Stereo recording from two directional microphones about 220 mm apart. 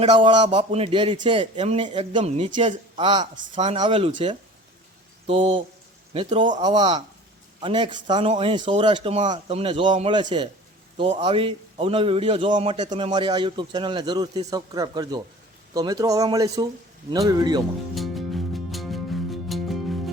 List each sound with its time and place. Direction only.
0.0 s a man's voice: 25° right (ahead or behind)
13.1 s a man's voice: 20° right (ahead or behind)
17.9 s music: centre (ahead or behind)